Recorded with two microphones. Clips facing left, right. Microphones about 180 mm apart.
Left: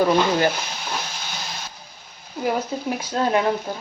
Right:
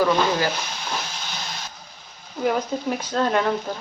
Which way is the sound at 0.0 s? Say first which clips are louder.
Left 2 dB; 25° left (ahead or behind).